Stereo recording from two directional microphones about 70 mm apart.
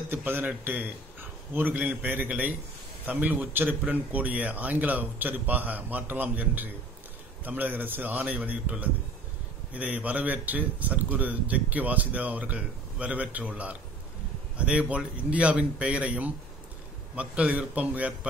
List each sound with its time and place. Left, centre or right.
0.1 s a man's voice: right